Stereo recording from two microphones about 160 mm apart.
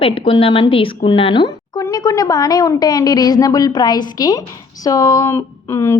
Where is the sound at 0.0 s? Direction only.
35° left (ahead or behind).